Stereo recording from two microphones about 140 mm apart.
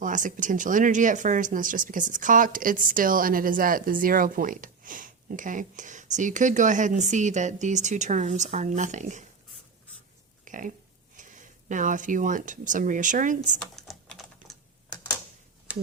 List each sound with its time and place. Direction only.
0.0 s speech: 65° right (ahead or behind)
10.4 s pig: 65° right (ahead or behind)
11.2 s speech: 65° right (ahead or behind)
13.6 s typing: 5° left (ahead or behind)